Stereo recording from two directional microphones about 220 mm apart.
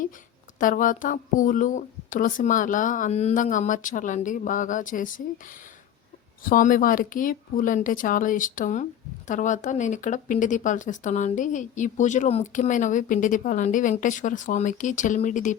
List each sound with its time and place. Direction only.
0.6 s a woman's voice: 35° left (ahead or behind)
6.4 s a woman's voice: 40° left (ahead or behind)